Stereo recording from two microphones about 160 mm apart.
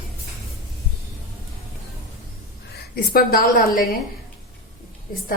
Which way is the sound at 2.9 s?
70° left (ahead or behind).